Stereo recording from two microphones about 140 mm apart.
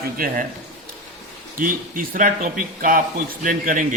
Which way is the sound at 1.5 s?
85° right.